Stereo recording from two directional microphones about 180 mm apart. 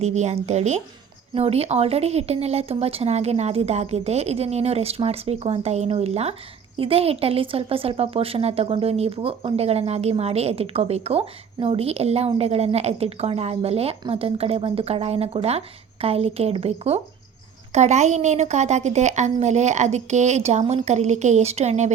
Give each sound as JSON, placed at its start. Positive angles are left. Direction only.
{"t": 0.0, "sound": "a woman's voice", "side_deg": -40}